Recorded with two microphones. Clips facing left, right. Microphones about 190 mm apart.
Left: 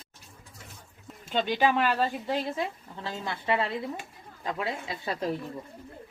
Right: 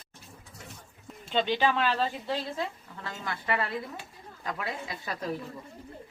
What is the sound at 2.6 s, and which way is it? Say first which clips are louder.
Speech: left 2 dB; 25° left (ahead or behind).